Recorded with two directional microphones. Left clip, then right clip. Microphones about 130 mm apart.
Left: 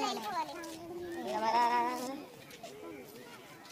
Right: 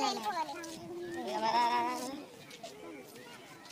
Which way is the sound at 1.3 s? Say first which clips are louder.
Left 1 dB; 35° left (ahead or behind).